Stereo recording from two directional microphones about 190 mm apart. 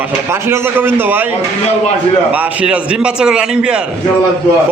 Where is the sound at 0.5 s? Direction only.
10° right (ahead or behind).